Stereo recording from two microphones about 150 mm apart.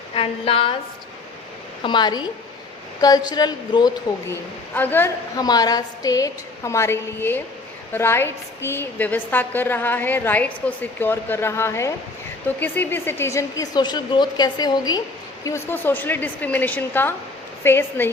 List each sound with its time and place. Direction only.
0.1 s a woman's voice: 40° left (ahead or behind)
1.8 s a woman's voice: 30° left (ahead or behind)
4.3 s a woman's voice: 10° left (ahead or behind)
5.4 s a woman's voice: 25° left (ahead or behind)